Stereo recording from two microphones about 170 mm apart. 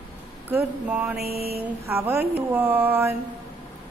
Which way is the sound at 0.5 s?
10° right (ahead or behind).